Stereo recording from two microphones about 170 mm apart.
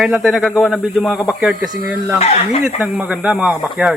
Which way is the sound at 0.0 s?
Centre (ahead or behind).